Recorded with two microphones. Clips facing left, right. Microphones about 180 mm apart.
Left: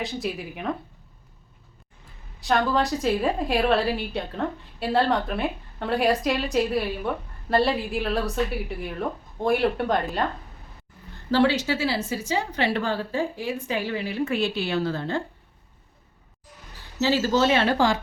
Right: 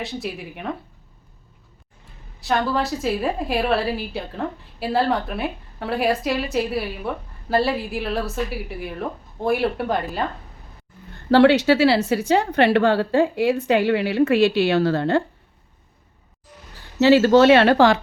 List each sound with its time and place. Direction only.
0.0 s a woman's voice: centre (ahead or behind)
2.4 s a woman's voice: centre (ahead or behind)
11.3 s a woman's voice: 65° right (ahead or behind)
17.0 s a woman's voice: 65° right (ahead or behind)